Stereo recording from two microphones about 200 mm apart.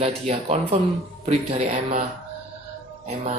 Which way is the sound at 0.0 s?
30° right (ahead or behind).